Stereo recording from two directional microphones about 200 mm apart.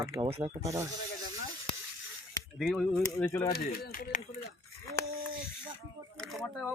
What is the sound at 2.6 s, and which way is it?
Speech, centre (ahead or behind).